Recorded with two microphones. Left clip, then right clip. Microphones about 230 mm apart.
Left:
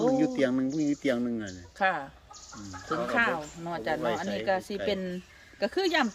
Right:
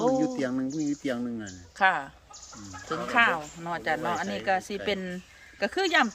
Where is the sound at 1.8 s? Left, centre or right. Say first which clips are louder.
Right 4 dB; centre.